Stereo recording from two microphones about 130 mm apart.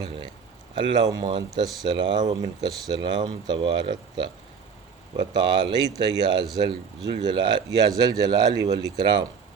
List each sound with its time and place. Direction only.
0.8 s speech: 35° right (ahead or behind)